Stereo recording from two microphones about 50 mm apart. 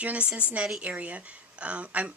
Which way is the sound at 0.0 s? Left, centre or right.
Right.